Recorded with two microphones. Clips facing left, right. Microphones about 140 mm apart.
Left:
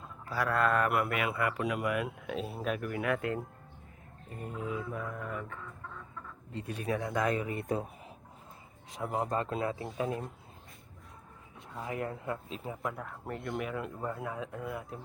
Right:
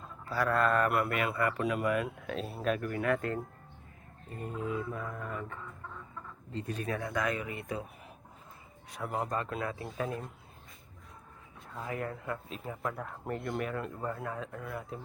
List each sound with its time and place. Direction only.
0.3 s mantra: 5° left (ahead or behind)
1.0 s speech: 5° left (ahead or behind)
4.5 s mantra: 10° left (ahead or behind)
6.5 s speech: 10° left (ahead or behind); by 7.9 s 35° left (ahead or behind)
8.9 s speech: 20° left (ahead or behind)
11.7 s speech: 20° left (ahead or behind)
13.2 s mantra: 5° right (ahead or behind)
13.7 s speech: 5° left (ahead or behind)